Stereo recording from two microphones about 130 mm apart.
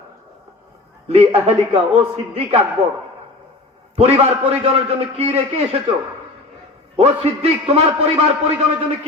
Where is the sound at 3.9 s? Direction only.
50° right (ahead or behind).